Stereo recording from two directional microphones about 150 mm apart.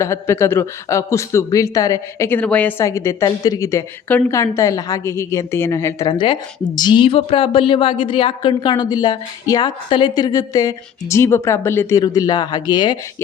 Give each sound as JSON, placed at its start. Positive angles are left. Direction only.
{"t": 0.0, "sound": "speech", "side_deg": 20}